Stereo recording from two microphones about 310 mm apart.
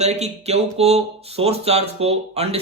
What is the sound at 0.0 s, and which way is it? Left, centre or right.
Speech, right.